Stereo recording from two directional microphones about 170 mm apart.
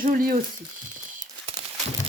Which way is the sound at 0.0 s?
55° right (ahead or behind).